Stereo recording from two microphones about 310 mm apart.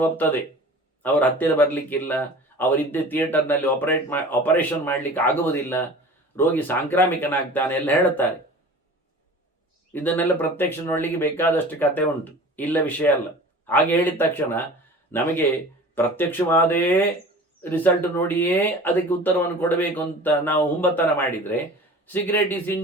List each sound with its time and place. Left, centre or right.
0.0 s speech: centre
9.9 s speech: centre